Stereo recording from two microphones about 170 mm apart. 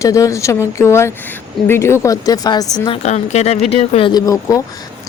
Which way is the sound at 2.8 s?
35° left (ahead or behind).